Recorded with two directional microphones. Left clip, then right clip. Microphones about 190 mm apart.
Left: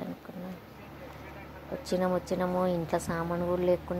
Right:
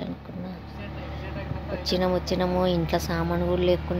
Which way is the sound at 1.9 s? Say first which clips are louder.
Right 4 dB; 25° left (ahead or behind).